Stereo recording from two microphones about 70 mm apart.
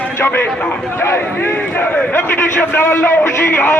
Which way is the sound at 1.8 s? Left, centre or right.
Left.